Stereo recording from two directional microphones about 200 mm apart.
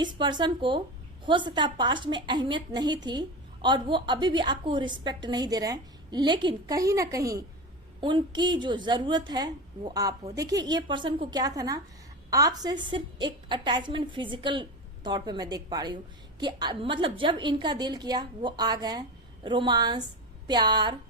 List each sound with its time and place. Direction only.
0.0 s a woman's voice: 20° right (ahead or behind)